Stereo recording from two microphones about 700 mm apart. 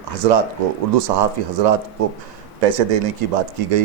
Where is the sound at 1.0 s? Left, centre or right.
Right.